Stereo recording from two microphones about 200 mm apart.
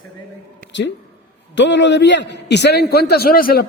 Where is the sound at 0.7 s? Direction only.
60° left (ahead or behind).